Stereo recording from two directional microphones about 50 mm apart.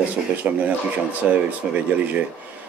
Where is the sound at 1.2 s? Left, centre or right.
Right.